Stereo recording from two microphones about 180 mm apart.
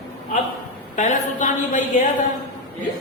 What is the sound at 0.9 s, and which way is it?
Speech, 45° left (ahead or behind).